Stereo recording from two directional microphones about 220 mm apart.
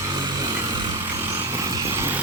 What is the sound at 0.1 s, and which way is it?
Vehicle, 20° right (ahead or behind).